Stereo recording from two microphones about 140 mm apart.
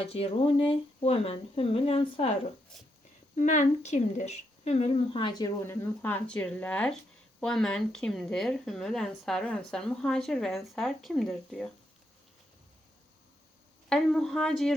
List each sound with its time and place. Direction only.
0.0 s speech: 45° left (ahead or behind)
3.3 s speech: 60° left (ahead or behind); by 5.5 s 30° left (ahead or behind)
5.6 s a woman's voice: 15° left (ahead or behind); by 11.7 s centre (ahead or behind)
13.9 s a woman's voice: 5° left (ahead or behind)